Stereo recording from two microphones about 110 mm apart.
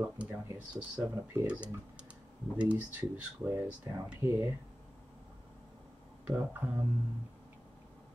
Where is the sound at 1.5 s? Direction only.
10° right (ahead or behind).